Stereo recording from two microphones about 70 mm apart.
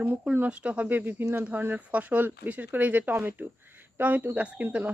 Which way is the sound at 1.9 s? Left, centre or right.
Right.